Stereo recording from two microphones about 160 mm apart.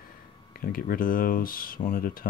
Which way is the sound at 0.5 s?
65° left (ahead or behind).